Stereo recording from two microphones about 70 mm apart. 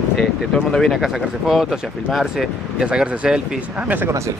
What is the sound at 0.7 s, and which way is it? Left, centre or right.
Speech, centre.